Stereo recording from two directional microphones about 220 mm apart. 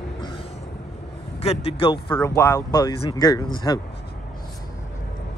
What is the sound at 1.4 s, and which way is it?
A man's voice, 25° left (ahead or behind).